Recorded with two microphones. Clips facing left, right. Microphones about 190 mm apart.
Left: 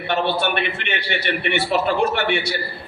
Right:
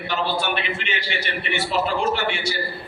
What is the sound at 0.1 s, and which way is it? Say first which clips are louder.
A man's voice: left 4 dB; 65° left (ahead or behind).